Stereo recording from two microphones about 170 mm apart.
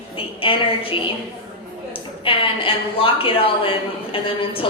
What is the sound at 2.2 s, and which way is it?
A woman's voice, 30° left (ahead or behind).